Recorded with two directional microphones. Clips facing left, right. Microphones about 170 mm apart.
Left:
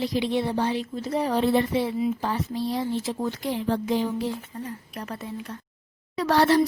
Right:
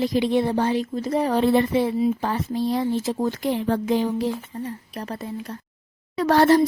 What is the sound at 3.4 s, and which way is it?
Speech, 55° right (ahead or behind).